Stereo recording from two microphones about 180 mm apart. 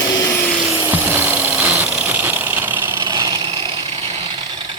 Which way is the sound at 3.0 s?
20° right (ahead or behind).